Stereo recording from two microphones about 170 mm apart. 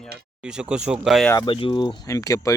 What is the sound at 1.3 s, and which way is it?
Speech, 25° left (ahead or behind).